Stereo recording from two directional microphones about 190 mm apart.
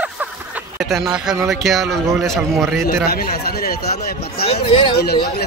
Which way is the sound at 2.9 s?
55° left (ahead or behind).